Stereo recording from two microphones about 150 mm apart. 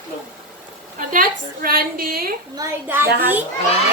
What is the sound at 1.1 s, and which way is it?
A woman's voice, 70° right (ahead or behind).